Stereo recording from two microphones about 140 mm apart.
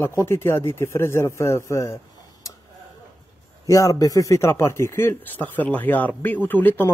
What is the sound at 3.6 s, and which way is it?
Speech, 25° left (ahead or behind).